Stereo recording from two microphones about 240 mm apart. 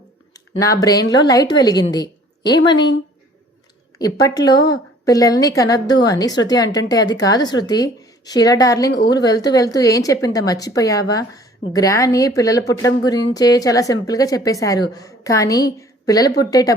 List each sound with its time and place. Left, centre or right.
0.6 s speech: centre
3.9 s speech: centre